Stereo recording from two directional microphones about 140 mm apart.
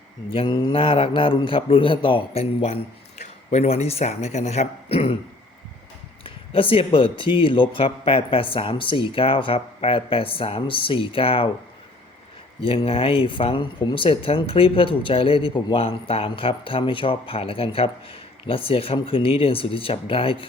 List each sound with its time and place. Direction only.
0.3 s speech: 35° left (ahead or behind)
6.2 s speech: 40° left (ahead or behind)
12.6 s speech: 45° left (ahead or behind)